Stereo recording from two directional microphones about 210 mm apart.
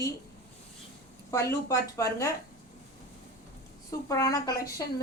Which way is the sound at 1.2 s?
15° left (ahead or behind).